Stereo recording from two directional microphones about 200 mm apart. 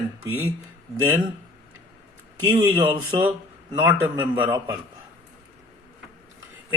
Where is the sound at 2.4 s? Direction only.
15° right (ahead or behind).